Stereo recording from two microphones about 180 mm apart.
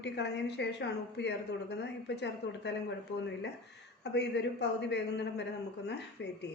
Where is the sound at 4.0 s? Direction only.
70° left (ahead or behind).